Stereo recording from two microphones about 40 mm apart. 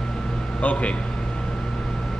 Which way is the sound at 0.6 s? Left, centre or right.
Left.